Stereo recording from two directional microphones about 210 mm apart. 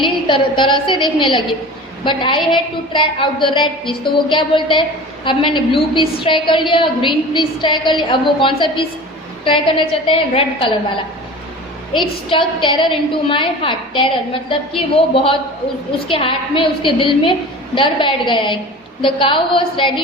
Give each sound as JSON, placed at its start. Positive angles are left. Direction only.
{"t": 0.0, "sound": "a woman's voice", "side_deg": 25}
{"t": 11.9, "sound": "a woman's voice", "side_deg": 25}